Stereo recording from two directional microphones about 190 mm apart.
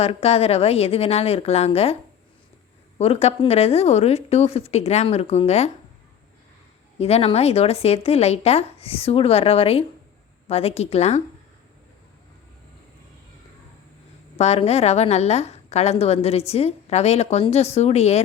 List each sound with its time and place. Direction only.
0.0 s a woman's voice: 35° left (ahead or behind)
3.0 s a woman's voice: 30° left (ahead or behind)
7.0 s a woman's voice: 30° left (ahead or behind)
14.3 s a woman's voice: 35° left (ahead or behind)